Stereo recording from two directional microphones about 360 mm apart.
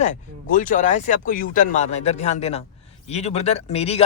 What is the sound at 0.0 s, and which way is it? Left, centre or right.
Speech, left.